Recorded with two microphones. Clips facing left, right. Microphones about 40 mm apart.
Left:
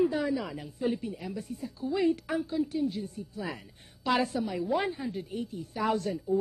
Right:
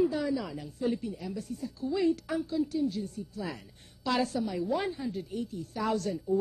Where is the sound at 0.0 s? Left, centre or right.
Left.